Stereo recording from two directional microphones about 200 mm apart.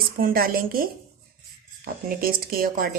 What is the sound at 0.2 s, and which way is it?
A woman's voice, 45° right (ahead or behind).